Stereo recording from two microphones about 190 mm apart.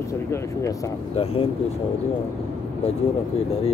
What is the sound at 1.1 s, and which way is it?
Speech, 30° left (ahead or behind).